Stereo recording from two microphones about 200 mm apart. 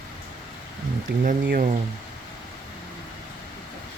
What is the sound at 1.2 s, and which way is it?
Speech, 45° right (ahead or behind).